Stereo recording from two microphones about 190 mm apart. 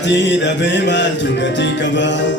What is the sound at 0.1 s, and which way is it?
Music, 70° left (ahead or behind).